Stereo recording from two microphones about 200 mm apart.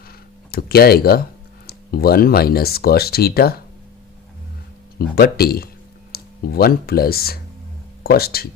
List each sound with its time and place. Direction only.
0.5 s speech: 50° left (ahead or behind)
4.9 s speech: 50° left (ahead or behind)